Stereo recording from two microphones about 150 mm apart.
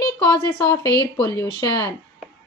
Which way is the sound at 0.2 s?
20° left (ahead or behind).